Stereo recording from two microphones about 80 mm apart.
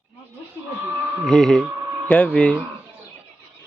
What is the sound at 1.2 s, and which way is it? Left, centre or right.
Speech, centre.